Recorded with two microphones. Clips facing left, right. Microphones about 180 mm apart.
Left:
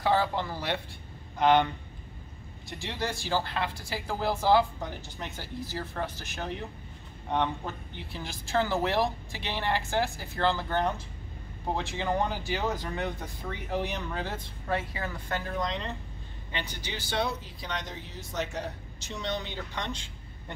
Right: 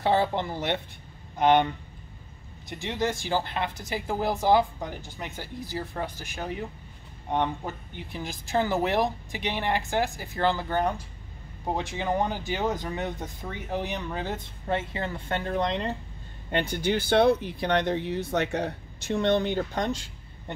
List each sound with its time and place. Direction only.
0.0 s speech: 25° right (ahead or behind)
2.8 s speech: 20° right (ahead or behind)
16.4 s speech: 55° right (ahead or behind)